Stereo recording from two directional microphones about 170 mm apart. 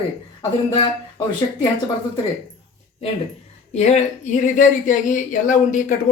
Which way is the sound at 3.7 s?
40° left (ahead or behind).